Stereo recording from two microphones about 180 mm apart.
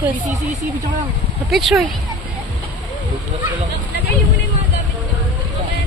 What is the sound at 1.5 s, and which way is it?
Speech, centre (ahead or behind).